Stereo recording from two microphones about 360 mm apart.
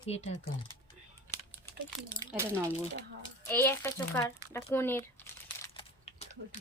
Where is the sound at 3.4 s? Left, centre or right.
Centre.